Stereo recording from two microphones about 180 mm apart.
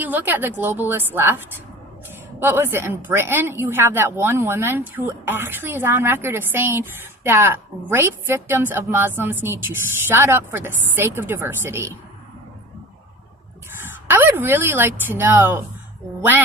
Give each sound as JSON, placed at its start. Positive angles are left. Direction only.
{"t": 0.0, "sound": "speech", "side_deg": -10}
{"t": 14.1, "sound": "speech", "side_deg": -10}